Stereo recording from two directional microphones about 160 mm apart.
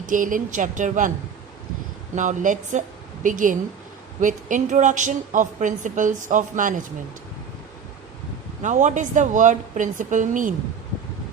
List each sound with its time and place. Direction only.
0.0 s a woman's voice: 55° right (ahead or behind)
2.1 s a woman's voice: 50° right (ahead or behind)
8.6 s a woman's voice: 50° right (ahead or behind)